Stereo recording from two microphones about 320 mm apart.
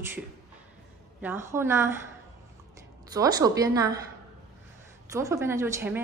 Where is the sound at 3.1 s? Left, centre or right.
Centre.